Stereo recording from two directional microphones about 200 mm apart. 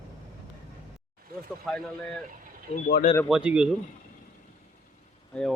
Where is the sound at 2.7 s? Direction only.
50° left (ahead or behind).